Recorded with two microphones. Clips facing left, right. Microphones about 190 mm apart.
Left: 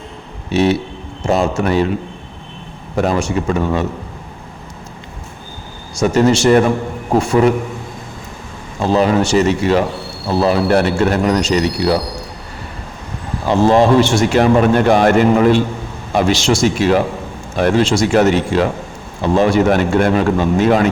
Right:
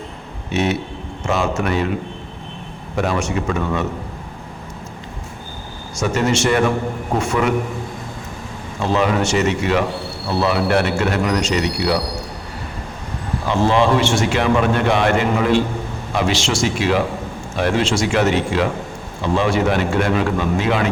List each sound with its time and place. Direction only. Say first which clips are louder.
0.5 s speech: left 5 dB; 30° left (ahead or behind)
2.9 s speech: left 4 dB; 35° left (ahead or behind)
6.0 s speech: left 6 dB; 35° left (ahead or behind)
8.8 s speech: left 4 dB; 35° left (ahead or behind)
13.5 s a man's voice: left 5 dB; 40° left (ahead or behind)